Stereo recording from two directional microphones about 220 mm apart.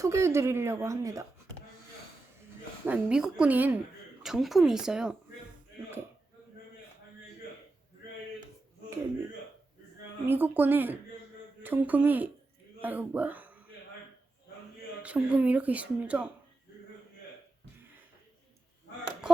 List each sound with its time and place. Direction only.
0.0 s a woman's voice: 15° right (ahead or behind)
2.8 s a woman's voice: 5° right (ahead or behind)
10.2 s a woman's voice: 10° right (ahead or behind)
15.0 s a woman's voice: 5° right (ahead or behind)